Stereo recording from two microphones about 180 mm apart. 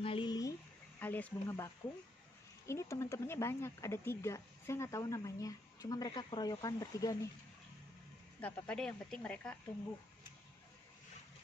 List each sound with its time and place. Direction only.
0.0 s a sound: 30° left (ahead or behind)
2.6 s speech: 15° left (ahead or behind)
8.4 s speech: 5° left (ahead or behind)